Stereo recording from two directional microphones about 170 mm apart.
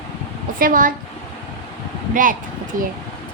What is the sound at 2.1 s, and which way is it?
Speech, 55° right (ahead or behind).